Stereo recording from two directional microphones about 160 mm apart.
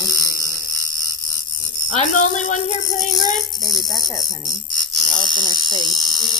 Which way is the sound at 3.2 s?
25° left (ahead or behind).